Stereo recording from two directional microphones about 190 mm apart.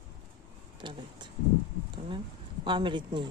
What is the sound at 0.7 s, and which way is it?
Speech, 25° right (ahead or behind).